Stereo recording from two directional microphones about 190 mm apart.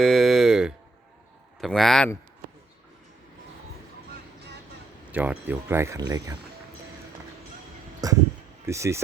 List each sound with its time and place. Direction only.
0.0 s a sound: centre (ahead or behind)
1.6 s a man's voice: centre (ahead or behind)
5.1 s speech: 10° right (ahead or behind)
8.0 s speech: 20° right (ahead or behind)